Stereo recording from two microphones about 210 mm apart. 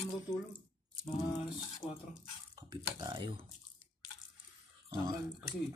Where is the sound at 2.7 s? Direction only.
20° right (ahead or behind).